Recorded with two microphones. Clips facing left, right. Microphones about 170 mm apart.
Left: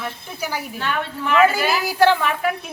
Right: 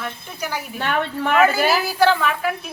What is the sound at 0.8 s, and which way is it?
Speech, 55° right (ahead or behind).